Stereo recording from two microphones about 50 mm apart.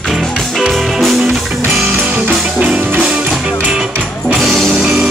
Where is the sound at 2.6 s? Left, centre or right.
Right.